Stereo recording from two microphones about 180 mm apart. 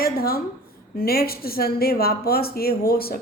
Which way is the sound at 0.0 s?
55° left (ahead or behind).